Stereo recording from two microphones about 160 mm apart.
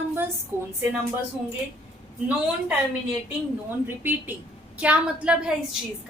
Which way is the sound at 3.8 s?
10° right (ahead or behind).